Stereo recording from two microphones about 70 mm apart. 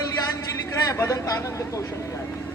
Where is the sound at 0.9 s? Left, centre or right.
Left.